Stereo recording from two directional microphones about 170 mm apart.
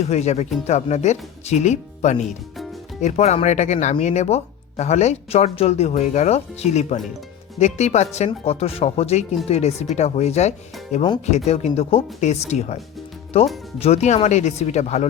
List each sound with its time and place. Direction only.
0.1 s speech: 40° left (ahead or behind)